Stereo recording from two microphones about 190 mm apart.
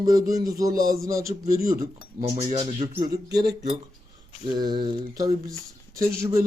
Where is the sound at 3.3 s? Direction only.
60° right (ahead or behind).